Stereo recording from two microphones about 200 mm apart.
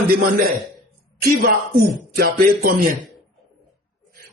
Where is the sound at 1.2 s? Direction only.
50° right (ahead or behind).